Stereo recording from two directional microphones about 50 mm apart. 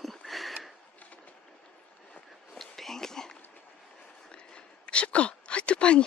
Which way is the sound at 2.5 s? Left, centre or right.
Centre.